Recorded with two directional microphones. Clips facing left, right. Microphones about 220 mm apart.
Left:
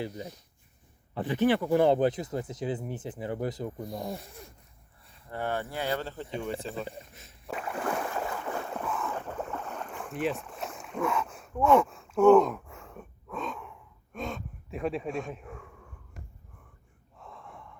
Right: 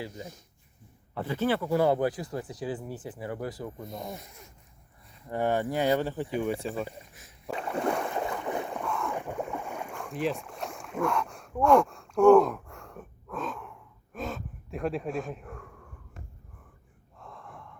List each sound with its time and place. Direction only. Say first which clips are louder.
0.1 s speech: left 2 dB; 45° right (ahead or behind)
1.1 s speech: left 3 dB; 15° left (ahead or behind)
3.8 s speech: left 3 dB; 20° right (ahead or behind)
4.1 s speech: left 3 dB; 35° left (ahead or behind)
5.3 s speech: right 6 dB; 15° right (ahead or behind)
6.6 s speech: right 3 dB; 5° right (ahead or behind)
7.1 s a sound: left 1 dB; 25° left (ahead or behind)
7.7 s boat: right 3 dB; 25° right (ahead or behind)
8.7 s boat: right 1 dB; 5° left (ahead or behind)
9.1 s boat: right 2 dB; 15° right (ahead or behind)
9.9 s rowboat: even; centre (ahead or behind)
17.2 s gasp: right 1 dB; centre (ahead or behind)